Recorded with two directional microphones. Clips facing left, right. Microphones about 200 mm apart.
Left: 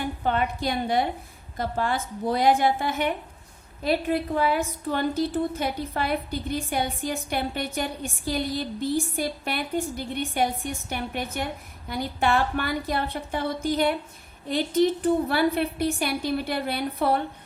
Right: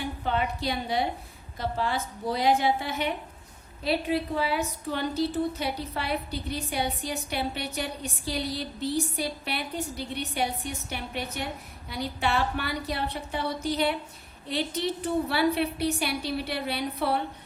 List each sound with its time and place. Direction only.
0.3 s a woman's voice: 55° left (ahead or behind)